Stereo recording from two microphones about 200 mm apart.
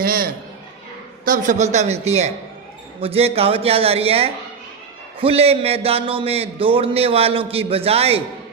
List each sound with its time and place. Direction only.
0.0 s a man's voice: 45° right (ahead or behind); by 8.2 s 30° right (ahead or behind)